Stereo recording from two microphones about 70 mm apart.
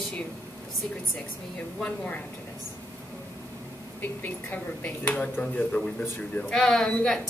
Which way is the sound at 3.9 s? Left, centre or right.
Left.